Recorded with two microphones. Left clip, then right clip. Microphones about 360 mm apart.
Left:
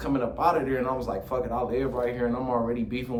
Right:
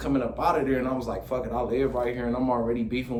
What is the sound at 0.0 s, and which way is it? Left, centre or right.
Speech, centre.